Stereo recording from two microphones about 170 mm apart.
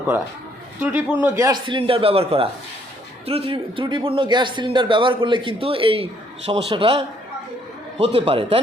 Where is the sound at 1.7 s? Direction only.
30° right (ahead or behind).